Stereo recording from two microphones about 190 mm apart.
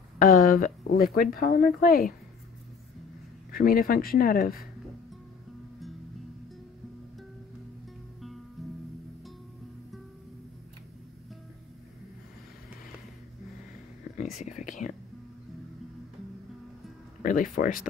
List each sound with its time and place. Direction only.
0.2 s a woman's voice: 45° left (ahead or behind)
3.5 s a woman's voice: 50° left (ahead or behind)
8.6 s music: centre (ahead or behind)
14.1 s whispering: 40° left (ahead or behind)
17.2 s speech: 45° left (ahead or behind)